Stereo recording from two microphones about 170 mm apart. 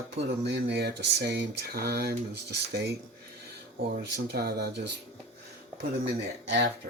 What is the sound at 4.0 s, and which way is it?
Speech, 70° right (ahead or behind).